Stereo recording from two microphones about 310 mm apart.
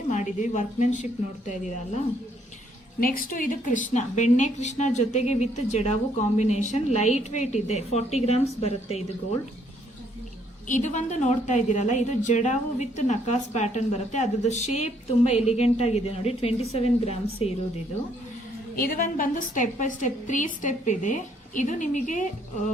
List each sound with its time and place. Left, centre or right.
0.1 s a woman's voice: left
3.0 s a woman's voice: left
10.7 s a woman's voice: left
18.8 s a woman's voice: left